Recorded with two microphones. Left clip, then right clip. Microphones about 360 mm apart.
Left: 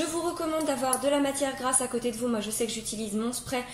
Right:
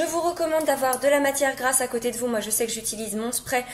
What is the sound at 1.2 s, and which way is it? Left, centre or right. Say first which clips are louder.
A woman's voice: right 6 dB; centre.